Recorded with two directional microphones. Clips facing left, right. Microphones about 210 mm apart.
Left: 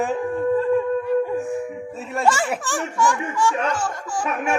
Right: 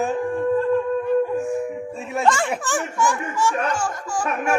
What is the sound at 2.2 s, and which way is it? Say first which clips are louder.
Speech: even; 5° left (ahead or behind).